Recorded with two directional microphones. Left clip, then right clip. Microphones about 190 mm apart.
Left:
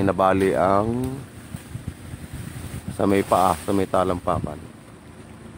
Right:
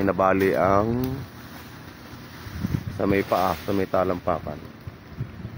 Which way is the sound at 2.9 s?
20° left (ahead or behind).